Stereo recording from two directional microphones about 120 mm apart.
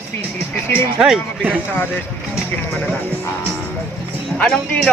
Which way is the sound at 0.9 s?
5° right (ahead or behind).